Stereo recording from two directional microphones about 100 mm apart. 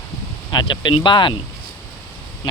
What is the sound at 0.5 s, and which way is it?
Speech, 50° left (ahead or behind).